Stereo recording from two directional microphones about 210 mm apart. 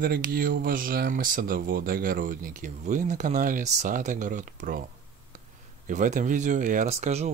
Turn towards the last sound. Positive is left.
turn(degrees=-30)  # may be behind; listen again after turning